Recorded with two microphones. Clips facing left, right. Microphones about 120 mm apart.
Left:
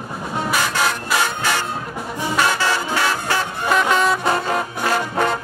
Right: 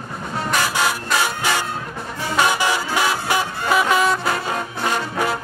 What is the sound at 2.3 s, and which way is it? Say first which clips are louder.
Music: right 1 dB; 15° right (ahead or behind).